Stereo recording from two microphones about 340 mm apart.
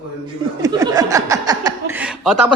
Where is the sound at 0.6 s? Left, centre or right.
Centre.